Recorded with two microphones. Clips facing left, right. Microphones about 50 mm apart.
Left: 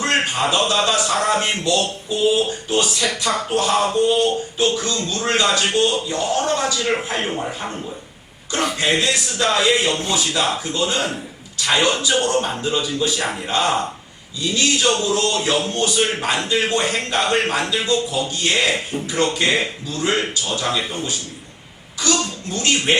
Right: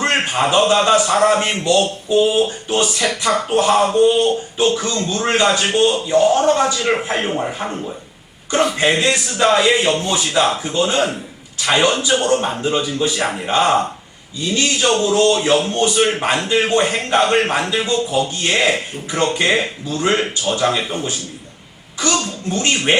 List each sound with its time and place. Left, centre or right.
0.0 s a man's voice: right
8.8 s a sound: centre
9.6 s speech: right